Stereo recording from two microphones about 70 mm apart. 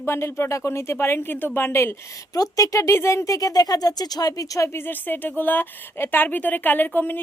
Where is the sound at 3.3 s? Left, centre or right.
Left.